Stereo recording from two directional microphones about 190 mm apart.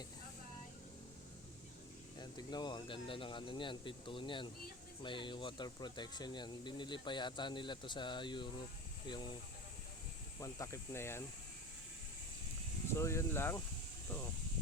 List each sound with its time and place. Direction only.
2.1 s speech: 20° left (ahead or behind)
10.4 s speech: 15° left (ahead or behind)
12.9 s speech: 15° left (ahead or behind)